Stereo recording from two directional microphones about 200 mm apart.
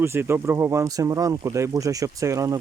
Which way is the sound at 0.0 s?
10° right (ahead or behind).